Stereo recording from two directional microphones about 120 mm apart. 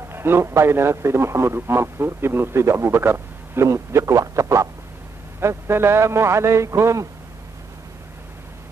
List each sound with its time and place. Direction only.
0.1 s a man's voice: 20° right (ahead or behind)